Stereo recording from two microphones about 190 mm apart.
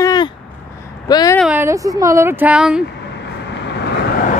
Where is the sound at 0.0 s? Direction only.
20° left (ahead or behind).